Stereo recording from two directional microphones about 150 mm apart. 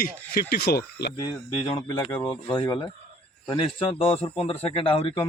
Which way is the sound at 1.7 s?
30° left (ahead or behind).